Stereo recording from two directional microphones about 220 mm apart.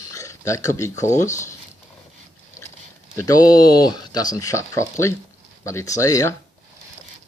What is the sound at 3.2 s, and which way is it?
Speech, 15° left (ahead or behind).